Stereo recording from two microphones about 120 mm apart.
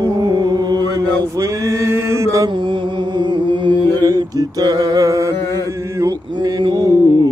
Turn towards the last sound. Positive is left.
turn(degrees=-35)  # may be behind; listen again after turning